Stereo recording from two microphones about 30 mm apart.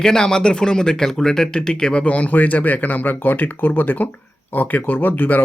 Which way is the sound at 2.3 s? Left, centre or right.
Left.